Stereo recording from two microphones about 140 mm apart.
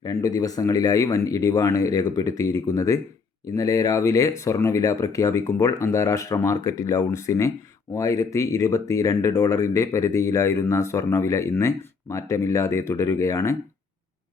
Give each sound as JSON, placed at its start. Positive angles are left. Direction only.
{"t": 0.0, "sound": "speech", "side_deg": 25}